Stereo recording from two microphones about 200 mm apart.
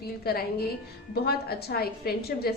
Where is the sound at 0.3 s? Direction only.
50° left (ahead or behind).